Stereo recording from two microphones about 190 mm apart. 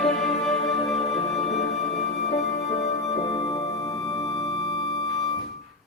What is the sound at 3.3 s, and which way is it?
Music, 25° left (ahead or behind).